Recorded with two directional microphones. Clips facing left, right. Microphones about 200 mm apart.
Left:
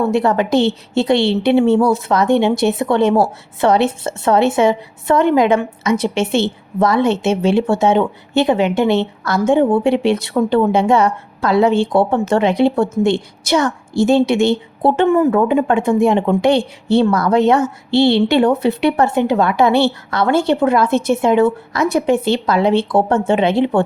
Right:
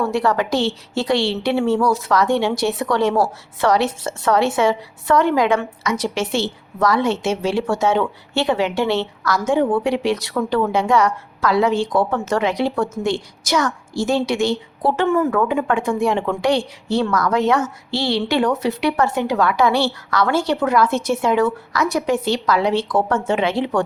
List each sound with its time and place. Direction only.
0.0 s speech: 20° left (ahead or behind)